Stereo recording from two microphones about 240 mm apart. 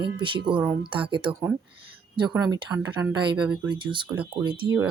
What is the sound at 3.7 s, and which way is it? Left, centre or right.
Speech, centre.